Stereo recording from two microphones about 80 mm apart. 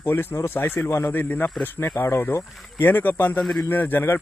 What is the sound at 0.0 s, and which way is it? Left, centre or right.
A man's voice, left.